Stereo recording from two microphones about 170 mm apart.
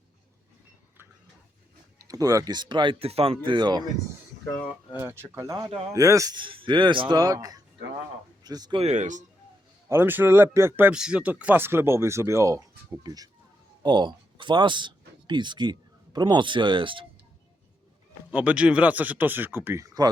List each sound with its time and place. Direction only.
2.0 s speech: 20° right (ahead or behind)
4.9 s speech: 15° right (ahead or behind)
8.8 s speech: 45° right (ahead or behind)
9.9 s speech: 10° right (ahead or behind); by 17.1 s 30° right (ahead or behind)
18.3 s speech: 10° right (ahead or behind)